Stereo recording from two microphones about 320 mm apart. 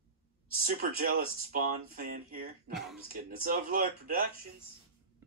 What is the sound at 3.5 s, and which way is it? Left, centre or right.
Speech, right.